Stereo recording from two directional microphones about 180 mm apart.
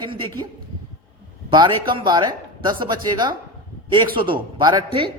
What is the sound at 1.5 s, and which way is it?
Speech, 25° right (ahead or behind).